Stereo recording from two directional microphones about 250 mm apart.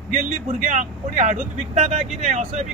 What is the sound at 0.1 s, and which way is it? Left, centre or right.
Speech, right.